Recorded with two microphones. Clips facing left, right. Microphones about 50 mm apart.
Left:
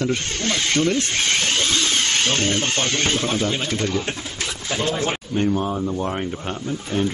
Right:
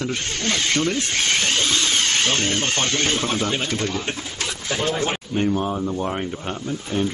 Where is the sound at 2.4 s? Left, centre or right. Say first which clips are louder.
Left 1 dB; centre.